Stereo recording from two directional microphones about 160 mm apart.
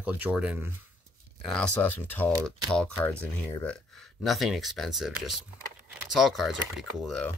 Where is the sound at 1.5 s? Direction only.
10° left (ahead or behind).